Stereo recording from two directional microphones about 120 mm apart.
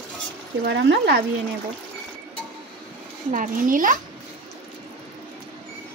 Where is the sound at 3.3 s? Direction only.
90° right.